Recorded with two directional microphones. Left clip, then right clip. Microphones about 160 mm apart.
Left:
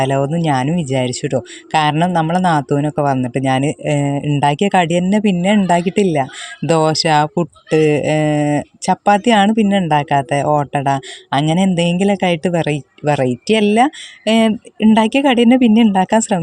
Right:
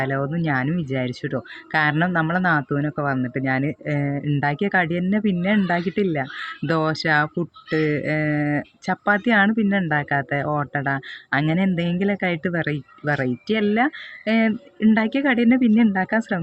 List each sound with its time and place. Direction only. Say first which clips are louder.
0.0 s speech: left 8 dB; 35° left (ahead or behind)